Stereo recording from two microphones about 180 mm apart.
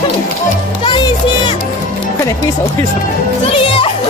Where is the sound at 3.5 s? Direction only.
30° left (ahead or behind).